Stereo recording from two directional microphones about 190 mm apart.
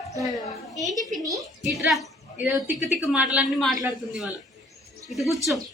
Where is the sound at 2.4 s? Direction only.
Centre (ahead or behind).